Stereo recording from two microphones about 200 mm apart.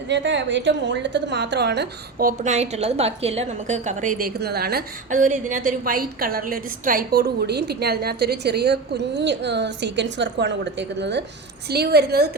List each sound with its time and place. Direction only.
0.1 s a woman's voice: 60° right (ahead or behind)